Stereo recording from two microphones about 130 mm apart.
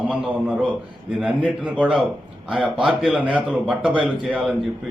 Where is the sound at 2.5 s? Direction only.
10° right (ahead or behind).